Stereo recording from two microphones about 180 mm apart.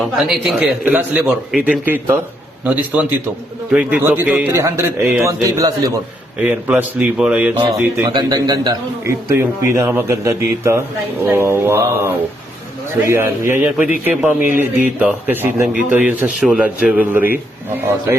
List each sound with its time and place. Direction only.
0.0 s a man's voice: centre (ahead or behind); by 5.7 s 20° right (ahead or behind)
6.4 s a man's voice: 10° right (ahead or behind)
8.1 s a man's voice: 20° right (ahead or behind)
13.1 s a man's voice: 15° right (ahead or behind)